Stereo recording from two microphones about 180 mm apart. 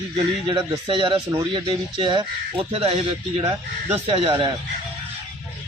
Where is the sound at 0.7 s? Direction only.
25° right (ahead or behind).